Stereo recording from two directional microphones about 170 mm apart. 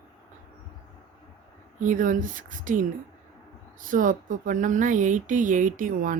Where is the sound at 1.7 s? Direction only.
50° right (ahead or behind).